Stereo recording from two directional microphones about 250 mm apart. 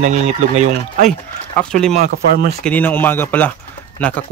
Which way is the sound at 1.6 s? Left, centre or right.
Centre.